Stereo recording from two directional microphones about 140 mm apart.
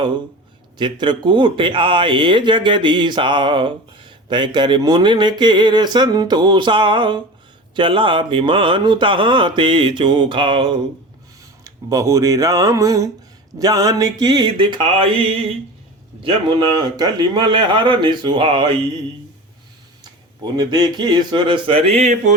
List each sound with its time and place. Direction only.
0.8 s speech: 35° right (ahead or behind)
11.6 s speech: 25° right (ahead or behind); by 15.5 s 40° right (ahead or behind)
16.2 s speech: 30° right (ahead or behind)
20.4 s speech: 30° right (ahead or behind); by 22.4 s 60° right (ahead or behind)